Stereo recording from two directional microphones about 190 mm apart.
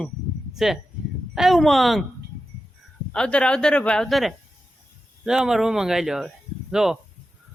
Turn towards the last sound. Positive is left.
turn(degrees=0)  # may be behind; listen again after turning